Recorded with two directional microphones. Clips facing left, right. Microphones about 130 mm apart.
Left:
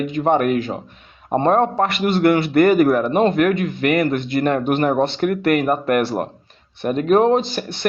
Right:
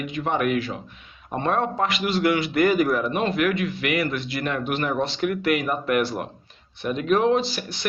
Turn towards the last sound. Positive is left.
turn(degrees=55)  # may be behind; listen again after turning